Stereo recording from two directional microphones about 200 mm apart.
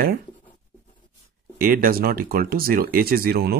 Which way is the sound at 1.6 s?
45° right (ahead or behind).